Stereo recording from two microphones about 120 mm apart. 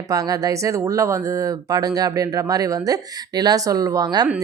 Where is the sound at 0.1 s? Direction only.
30° right (ahead or behind).